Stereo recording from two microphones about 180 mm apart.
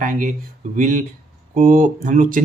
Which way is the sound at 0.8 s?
45° right (ahead or behind).